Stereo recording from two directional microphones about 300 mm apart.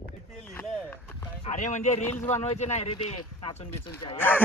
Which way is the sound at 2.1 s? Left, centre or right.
Centre.